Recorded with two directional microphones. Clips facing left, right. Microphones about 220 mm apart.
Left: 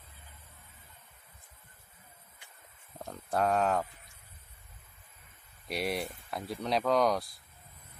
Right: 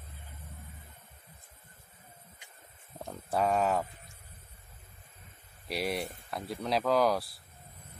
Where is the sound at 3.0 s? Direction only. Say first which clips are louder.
Even; centre (ahead or behind).